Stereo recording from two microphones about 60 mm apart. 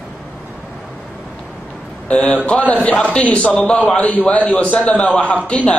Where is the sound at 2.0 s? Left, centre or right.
Left.